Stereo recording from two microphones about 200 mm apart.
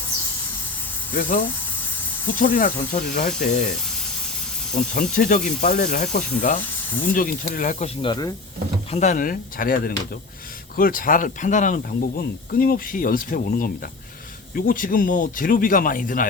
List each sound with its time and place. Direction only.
1.1 s speech: 45° left (ahead or behind)
1.5 s a sound: 10° left (ahead or behind)
2.2 s speech: 45° left (ahead or behind)
5.1 s speech: 40° left (ahead or behind)
6.6 s speech: 10° left (ahead or behind)
7.1 s speech: 45° left (ahead or behind)
8.0 s speech: 20° left (ahead or behind)
8.9 s speech: 35° left (ahead or behind)